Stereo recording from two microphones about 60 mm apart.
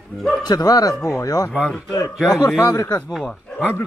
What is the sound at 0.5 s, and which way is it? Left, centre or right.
Speech, left.